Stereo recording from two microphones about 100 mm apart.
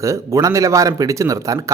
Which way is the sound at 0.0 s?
30° right (ahead or behind).